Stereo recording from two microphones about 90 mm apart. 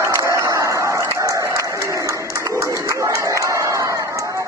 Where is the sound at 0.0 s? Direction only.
35° right (ahead or behind).